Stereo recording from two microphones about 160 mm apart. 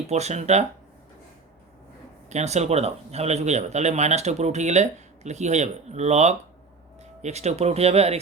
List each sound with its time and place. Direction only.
0.1 s speech: 45° right (ahead or behind)
2.3 s speech: 45° right (ahead or behind)